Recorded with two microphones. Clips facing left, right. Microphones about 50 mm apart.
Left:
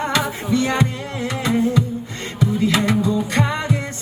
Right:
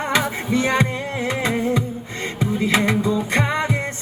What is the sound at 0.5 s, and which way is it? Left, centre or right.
Music, right.